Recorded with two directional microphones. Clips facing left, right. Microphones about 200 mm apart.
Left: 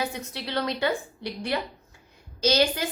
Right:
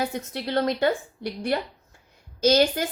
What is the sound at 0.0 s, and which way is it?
A woman's voice, 50° right (ahead or behind).